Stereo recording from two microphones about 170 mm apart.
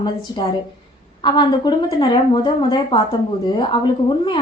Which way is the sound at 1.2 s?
25° left (ahead or behind).